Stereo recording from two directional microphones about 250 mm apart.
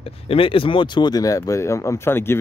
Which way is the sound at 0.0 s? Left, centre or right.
Left.